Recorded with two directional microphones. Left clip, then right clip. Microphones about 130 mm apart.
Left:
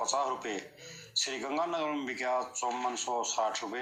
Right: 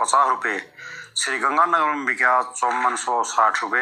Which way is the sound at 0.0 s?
30° right (ahead or behind).